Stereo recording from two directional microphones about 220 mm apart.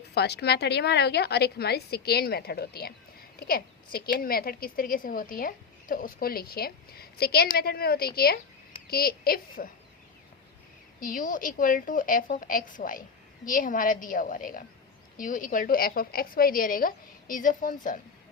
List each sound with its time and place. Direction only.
0.1 s speech: 50° left (ahead or behind)
11.0 s a woman's voice: 40° left (ahead or behind)